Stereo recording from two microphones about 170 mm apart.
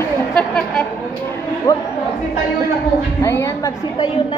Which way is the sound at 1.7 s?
20° left (ahead or behind).